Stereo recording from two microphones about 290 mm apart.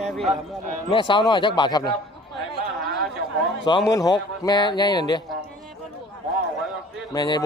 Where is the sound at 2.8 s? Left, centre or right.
Centre.